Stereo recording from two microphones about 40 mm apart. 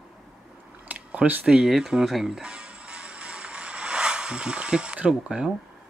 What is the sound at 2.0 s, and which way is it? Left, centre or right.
Music, centre.